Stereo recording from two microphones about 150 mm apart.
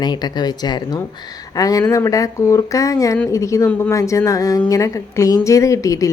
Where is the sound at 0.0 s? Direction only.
30° left (ahead or behind).